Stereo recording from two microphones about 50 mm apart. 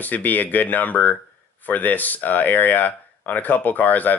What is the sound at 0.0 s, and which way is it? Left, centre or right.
Speech, left.